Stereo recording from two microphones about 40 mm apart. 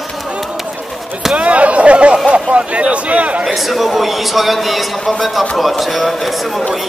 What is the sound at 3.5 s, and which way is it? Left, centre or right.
A man's voice, centre.